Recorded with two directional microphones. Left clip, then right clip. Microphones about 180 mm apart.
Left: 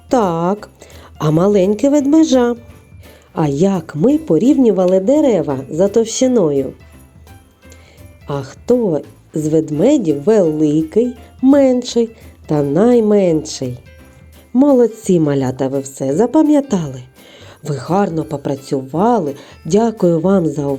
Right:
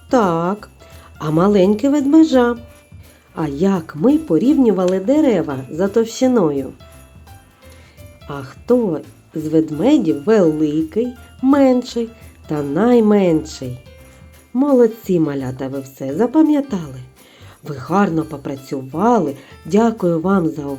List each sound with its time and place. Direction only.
0.1 s speech: 30° left (ahead or behind)
8.3 s speech: 20° left (ahead or behind)